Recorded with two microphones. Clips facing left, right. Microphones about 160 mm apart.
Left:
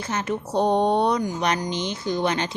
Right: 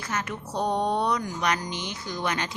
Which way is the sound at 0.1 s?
25° left (ahead or behind).